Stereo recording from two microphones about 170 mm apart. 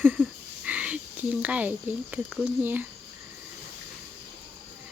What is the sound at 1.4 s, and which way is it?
Speech, 10° right (ahead or behind).